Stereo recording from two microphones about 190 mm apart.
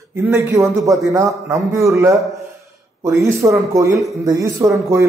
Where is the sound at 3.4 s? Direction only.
15° right (ahead or behind).